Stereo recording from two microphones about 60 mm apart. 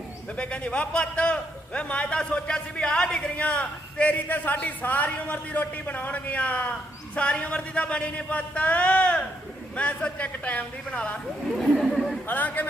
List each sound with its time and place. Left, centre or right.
0.3 s a man's voice: centre
11.5 s speech: centre
12.3 s a man's voice: left